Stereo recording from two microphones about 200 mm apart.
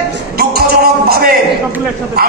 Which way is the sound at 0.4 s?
50° right (ahead or behind).